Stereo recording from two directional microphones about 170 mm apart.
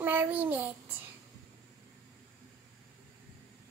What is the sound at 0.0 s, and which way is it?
Child singing, 10° right (ahead or behind).